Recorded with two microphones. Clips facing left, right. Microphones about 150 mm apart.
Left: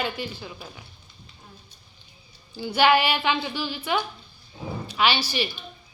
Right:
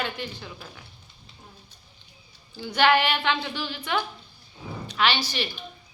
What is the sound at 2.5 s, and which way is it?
A woman's voice, 10° left (ahead or behind).